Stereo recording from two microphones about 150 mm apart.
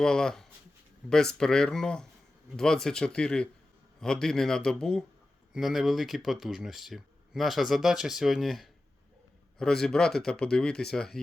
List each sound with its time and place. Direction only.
0.0 s speech: 5° left (ahead or behind)